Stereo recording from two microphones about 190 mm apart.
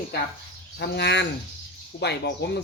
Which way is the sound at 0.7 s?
60° left (ahead or behind).